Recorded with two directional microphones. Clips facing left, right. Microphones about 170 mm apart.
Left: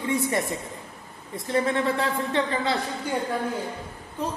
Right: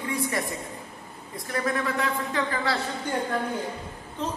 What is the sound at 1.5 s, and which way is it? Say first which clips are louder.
A woman's voice: left 4 dB; 25° left (ahead or behind).